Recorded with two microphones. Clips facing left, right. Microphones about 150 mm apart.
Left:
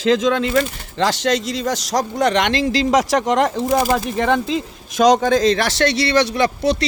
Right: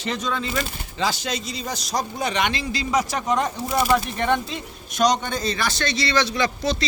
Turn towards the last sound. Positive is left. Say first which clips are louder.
# left 6 dB
turn(degrees=65)  # may be behind; listen again after turning